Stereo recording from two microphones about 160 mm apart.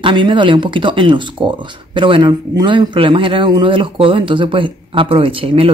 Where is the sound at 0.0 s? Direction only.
30° right (ahead or behind).